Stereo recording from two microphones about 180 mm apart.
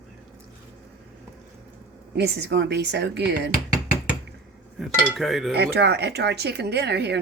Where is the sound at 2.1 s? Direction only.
70° right (ahead or behind).